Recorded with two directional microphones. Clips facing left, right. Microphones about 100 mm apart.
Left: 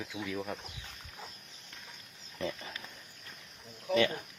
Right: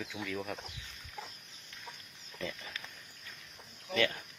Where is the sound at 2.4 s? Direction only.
30° left (ahead or behind).